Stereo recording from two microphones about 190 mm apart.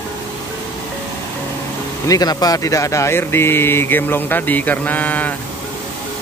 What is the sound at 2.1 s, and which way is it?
Speech, 20° left (ahead or behind).